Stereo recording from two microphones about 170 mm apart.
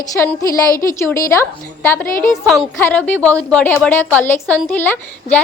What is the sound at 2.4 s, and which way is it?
A woman's voice, centre (ahead or behind).